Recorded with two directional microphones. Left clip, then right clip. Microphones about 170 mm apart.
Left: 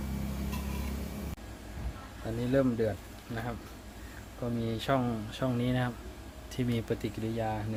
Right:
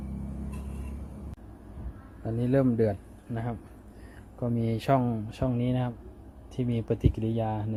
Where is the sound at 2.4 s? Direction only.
45° right (ahead or behind).